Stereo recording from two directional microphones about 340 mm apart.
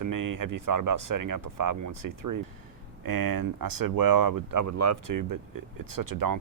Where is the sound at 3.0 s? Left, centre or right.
Right.